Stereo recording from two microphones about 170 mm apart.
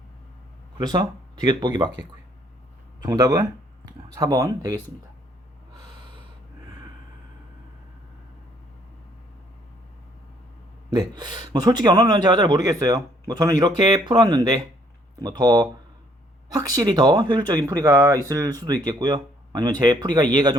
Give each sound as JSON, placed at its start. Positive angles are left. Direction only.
{"t": 0.8, "sound": "speech", "side_deg": -25}
{"t": 3.0, "sound": "speech", "side_deg": -20}
{"t": 10.9, "sound": "speech", "side_deg": -25}